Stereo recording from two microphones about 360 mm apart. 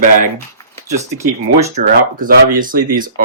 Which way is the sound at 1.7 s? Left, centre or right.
Right.